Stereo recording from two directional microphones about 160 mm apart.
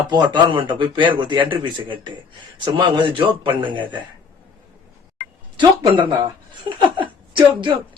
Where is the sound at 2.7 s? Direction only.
30° right (ahead or behind).